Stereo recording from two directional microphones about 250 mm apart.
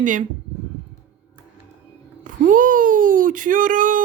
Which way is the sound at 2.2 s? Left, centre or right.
Right.